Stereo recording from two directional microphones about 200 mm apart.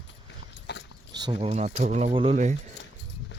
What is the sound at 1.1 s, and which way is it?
Speech, 25° right (ahead or behind).